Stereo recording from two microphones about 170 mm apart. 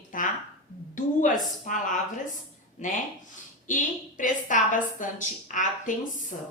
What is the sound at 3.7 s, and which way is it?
A woman's voice, 50° left (ahead or behind).